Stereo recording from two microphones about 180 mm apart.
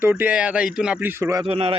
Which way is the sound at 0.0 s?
10° right (ahead or behind).